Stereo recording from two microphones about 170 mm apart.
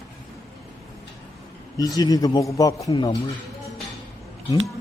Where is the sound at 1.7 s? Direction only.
20° left (ahead or behind).